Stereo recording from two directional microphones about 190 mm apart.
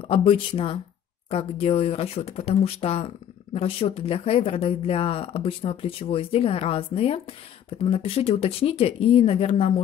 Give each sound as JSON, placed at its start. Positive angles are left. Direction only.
{"t": 0.0, "sound": "speech", "side_deg": 30}